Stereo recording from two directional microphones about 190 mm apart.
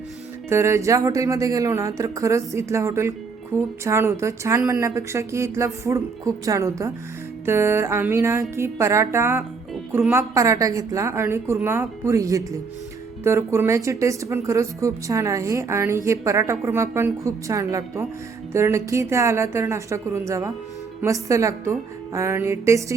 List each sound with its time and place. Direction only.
0.5 s speech: 15° right (ahead or behind)